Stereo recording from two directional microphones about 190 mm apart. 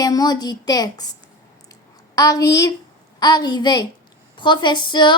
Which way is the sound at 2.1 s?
20° left (ahead or behind).